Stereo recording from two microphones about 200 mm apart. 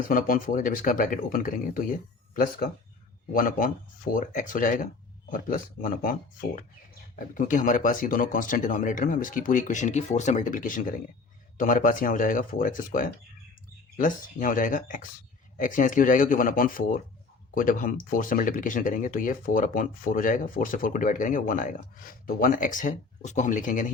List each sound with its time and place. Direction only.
0.1 s speech: 45° left (ahead or behind)
7.3 s speech: 40° left (ahead or behind)